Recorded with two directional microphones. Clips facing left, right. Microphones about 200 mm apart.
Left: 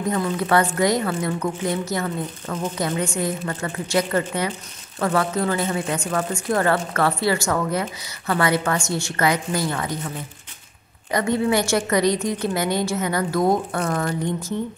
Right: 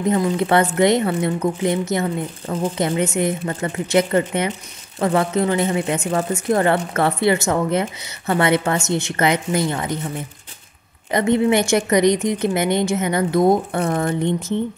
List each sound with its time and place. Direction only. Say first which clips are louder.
0.0 s speech: right 5 dB; 25° right (ahead or behind)
11.1 s speech: right 4 dB; 20° right (ahead or behind)